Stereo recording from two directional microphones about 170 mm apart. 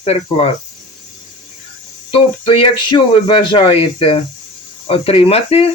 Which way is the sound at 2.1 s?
30° left (ahead or behind).